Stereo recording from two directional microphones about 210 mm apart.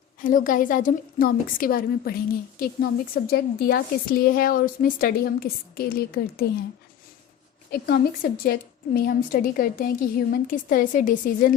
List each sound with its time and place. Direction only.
0.3 s a woman's voice: 40° left (ahead or behind)
7.7 s a woman's voice: 45° left (ahead or behind)